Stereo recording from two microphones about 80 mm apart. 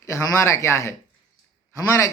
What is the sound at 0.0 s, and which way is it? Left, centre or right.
Speech, left.